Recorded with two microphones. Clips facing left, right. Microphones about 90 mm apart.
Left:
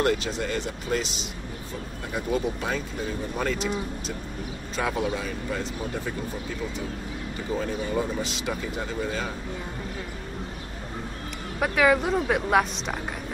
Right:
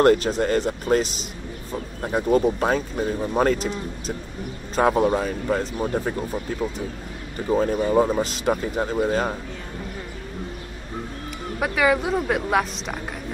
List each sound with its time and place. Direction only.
0.0 s speech: 45° right (ahead or behind)
4.7 s speech: 45° right (ahead or behind)
7.4 s speech: 45° right (ahead or behind)
11.6 s speech: centre (ahead or behind)